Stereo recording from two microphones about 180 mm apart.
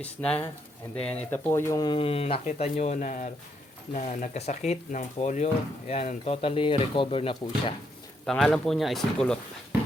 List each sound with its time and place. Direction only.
0.0 s speech: 5° left (ahead or behind)
1.5 s speech: 15° left (ahead or behind)
8.3 s speech: 5° left (ahead or behind)